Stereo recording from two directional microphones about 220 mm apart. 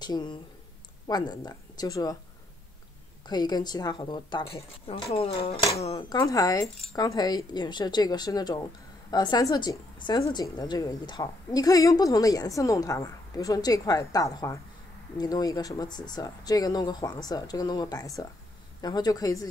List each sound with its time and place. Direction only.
0.0 s a woman's voice: 20° left (ahead or behind)
3.3 s a woman's voice: 20° left (ahead or behind)